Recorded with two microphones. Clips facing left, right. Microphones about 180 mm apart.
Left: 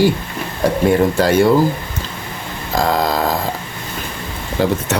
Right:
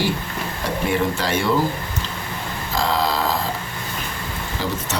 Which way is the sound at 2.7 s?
45° left (ahead or behind).